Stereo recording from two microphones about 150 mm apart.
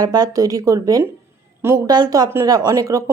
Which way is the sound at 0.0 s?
25° right (ahead or behind).